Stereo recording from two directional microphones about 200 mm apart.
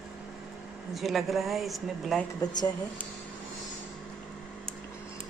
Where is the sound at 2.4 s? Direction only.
20° left (ahead or behind).